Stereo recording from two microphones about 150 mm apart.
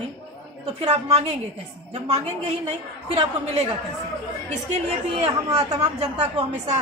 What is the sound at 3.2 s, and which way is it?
Speech, 40° right (ahead or behind).